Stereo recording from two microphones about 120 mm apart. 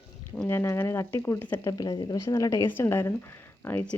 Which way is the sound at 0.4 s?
25° left (ahead or behind).